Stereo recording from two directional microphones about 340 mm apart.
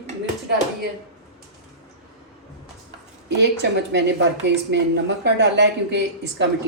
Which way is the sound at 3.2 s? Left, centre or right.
Right.